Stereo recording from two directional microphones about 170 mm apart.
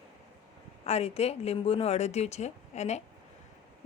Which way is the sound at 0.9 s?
40° left (ahead or behind).